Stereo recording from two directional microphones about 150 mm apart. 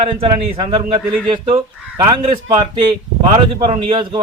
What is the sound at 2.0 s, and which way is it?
Speech, 30° right (ahead or behind).